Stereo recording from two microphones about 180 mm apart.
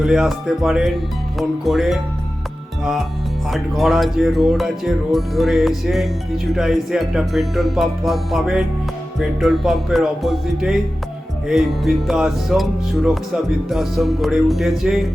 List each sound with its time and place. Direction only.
0.0 s speech: centre (ahead or behind)
3.5 s speech: centre (ahead or behind)